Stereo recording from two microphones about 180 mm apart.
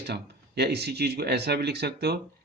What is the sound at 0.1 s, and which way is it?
Speech, 65° right (ahead or behind).